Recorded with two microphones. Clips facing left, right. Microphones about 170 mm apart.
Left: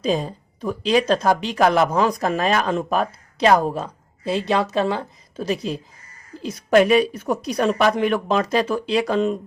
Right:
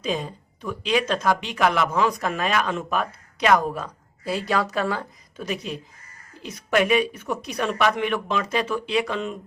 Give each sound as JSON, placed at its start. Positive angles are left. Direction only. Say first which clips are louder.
{"t": 0.0, "sound": "speech", "louder": "left 5 dB", "side_deg": 35}